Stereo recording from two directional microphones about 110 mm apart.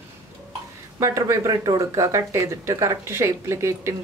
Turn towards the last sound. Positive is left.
turn(degrees=-25)  # may be behind; listen again after turning